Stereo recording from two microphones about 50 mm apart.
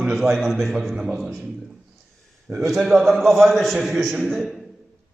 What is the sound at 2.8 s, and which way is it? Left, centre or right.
A man's voice, centre.